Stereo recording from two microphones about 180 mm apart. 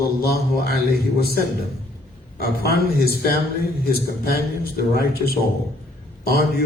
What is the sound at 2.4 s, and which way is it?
A man's voice, 60° left (ahead or behind).